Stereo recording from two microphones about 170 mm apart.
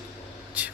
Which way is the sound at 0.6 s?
10° right (ahead or behind).